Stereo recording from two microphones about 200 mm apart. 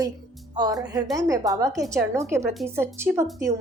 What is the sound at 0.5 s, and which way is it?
A woman's voice, 20° right (ahead or behind).